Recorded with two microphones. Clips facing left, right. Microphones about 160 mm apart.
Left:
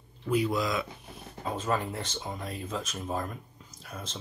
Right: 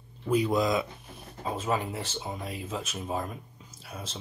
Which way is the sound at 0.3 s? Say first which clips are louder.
Right 3 dB; 20° right (ahead or behind).